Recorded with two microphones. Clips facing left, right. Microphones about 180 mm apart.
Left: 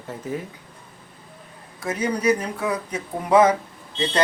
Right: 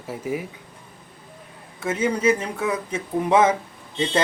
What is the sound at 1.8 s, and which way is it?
Speech, 25° right (ahead or behind).